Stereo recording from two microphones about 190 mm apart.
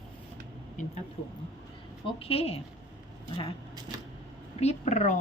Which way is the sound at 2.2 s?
30° left (ahead or behind).